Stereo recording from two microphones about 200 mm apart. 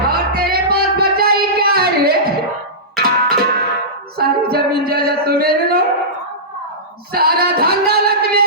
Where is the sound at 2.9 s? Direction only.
50° right (ahead or behind).